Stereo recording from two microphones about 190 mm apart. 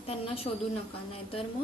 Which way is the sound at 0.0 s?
30° left (ahead or behind).